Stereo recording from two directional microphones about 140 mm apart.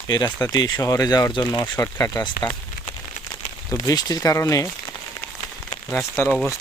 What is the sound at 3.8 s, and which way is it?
Speech, 30° left (ahead or behind).